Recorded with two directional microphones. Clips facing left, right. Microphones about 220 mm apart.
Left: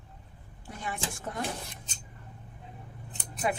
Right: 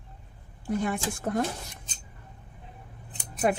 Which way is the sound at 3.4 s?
50° right (ahead or behind).